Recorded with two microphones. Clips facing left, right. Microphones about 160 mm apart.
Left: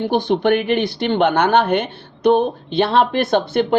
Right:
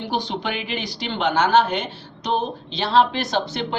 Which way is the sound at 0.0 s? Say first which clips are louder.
Left 9 dB; 55° left (ahead or behind).